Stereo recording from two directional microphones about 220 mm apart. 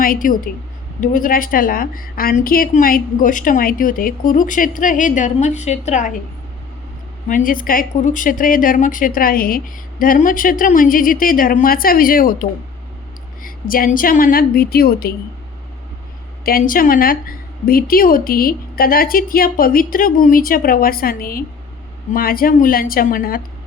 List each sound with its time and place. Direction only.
0.0 s a woman's voice: 40° left (ahead or behind)
7.3 s a woman's voice: 40° left (ahead or behind)
16.5 s a woman's voice: 40° left (ahead or behind)